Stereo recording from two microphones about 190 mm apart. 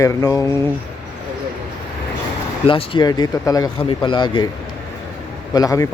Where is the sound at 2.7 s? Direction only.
25° left (ahead or behind).